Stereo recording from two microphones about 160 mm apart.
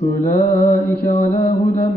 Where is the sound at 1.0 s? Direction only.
70° left (ahead or behind).